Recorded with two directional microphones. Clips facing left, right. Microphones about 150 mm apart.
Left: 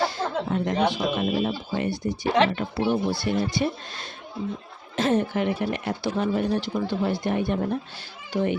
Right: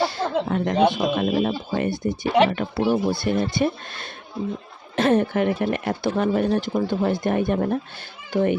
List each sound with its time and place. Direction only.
0.1 s a child's voice: 65° right (ahead or behind)